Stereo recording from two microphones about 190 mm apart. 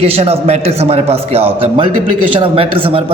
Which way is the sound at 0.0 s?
30° right (ahead or behind).